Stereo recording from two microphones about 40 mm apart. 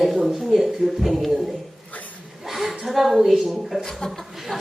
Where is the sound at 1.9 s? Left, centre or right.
Left.